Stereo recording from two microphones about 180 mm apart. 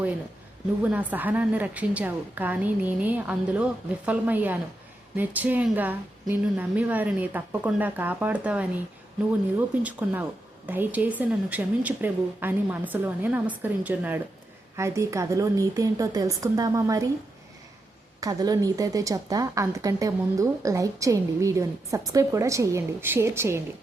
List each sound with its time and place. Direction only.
0.8 s a woman's voice: 10° right (ahead or behind)
18.2 s a woman's voice: 20° right (ahead or behind)